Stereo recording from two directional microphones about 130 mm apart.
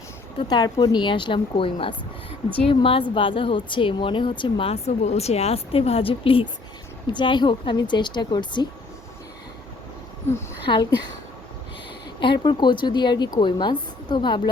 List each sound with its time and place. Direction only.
0.4 s speech: 30° left (ahead or behind)
10.7 s speech: 35° left (ahead or behind)
12.2 s speech: 40° left (ahead or behind)